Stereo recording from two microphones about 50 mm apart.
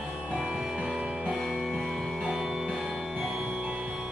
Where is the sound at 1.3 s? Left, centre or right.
Centre.